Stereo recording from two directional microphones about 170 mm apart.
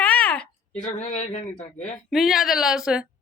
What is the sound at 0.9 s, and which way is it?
Speech, 45° left (ahead or behind).